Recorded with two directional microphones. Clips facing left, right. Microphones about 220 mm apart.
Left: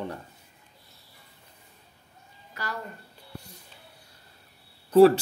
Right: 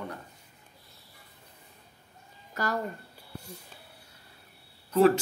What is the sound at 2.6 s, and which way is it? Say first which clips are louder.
Speech: right 5 dB; 45° right (ahead or behind).